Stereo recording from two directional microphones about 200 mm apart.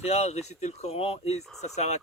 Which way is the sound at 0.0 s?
35° left (ahead or behind).